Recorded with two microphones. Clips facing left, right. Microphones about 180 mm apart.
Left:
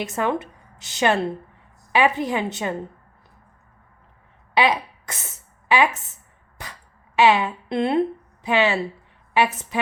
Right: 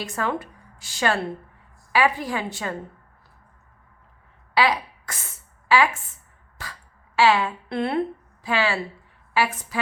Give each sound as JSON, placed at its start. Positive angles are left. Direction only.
{"t": 0.0, "sound": "speech", "side_deg": 20}
{"t": 4.5, "sound": "a sound", "side_deg": 20}
{"t": 7.2, "sound": "a woman's voice", "side_deg": 20}